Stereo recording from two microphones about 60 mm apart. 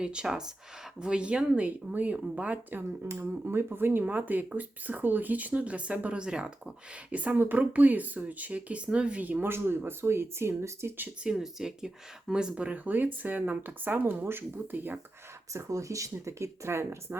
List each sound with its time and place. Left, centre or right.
0.0 s speech: centre; by 3.1 s right
3.1 s speech: right
9.5 s speech: right
11.3 s speech: centre; by 14.9 s right
15.5 s speech: right